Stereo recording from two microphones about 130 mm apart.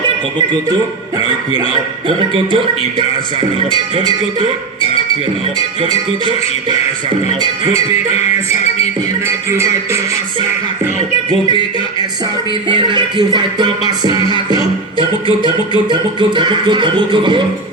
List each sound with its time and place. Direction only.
2.0 s speech: 40° right (ahead or behind)
5.8 s speech: 40° right (ahead or behind)
9.2 s speech: 20° right (ahead or behind)
12.6 s speech: 35° right (ahead or behind)